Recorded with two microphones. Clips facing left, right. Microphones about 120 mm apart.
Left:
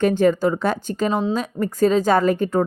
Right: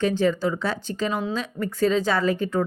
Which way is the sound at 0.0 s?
50° left (ahead or behind).